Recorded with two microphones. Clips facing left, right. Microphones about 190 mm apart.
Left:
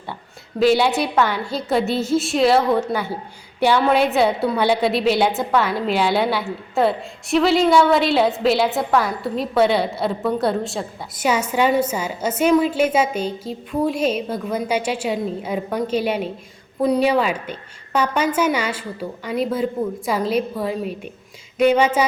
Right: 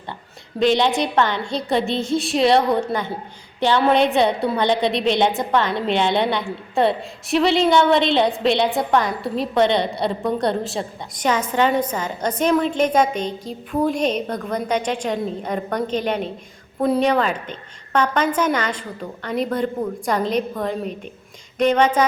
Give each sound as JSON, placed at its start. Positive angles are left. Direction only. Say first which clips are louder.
{"t": 0.6, "sound": "a woman's voice", "louder": "left 1 dB", "side_deg": 5}